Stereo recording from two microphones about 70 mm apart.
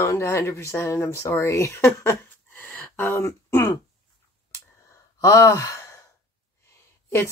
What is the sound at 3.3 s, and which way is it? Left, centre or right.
Speech, left.